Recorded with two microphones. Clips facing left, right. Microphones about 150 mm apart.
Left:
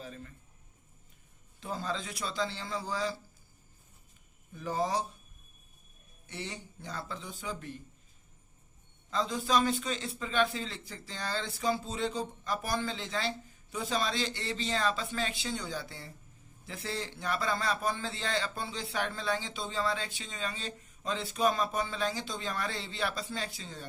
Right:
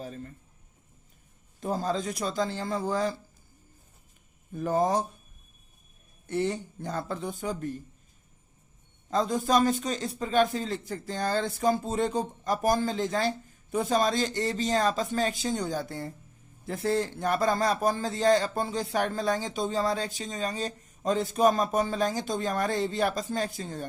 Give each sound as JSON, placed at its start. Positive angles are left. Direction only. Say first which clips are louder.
{"t": 0.0, "sound": "a sound", "louder": "right 6 dB", "side_deg": -40}
{"t": 1.6, "sound": "a man's voice", "louder": "right 8 dB", "side_deg": -40}
{"t": 4.5, "sound": "a man's voice", "louder": "right 6 dB", "side_deg": -50}
{"t": 6.2, "sound": "a man's voice", "louder": "right 13 dB", "side_deg": -50}
{"t": 9.0, "sound": "a man's voice", "louder": "right 6 dB", "side_deg": -45}